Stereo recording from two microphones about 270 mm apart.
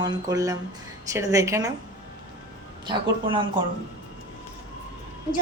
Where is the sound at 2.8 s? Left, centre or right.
Centre.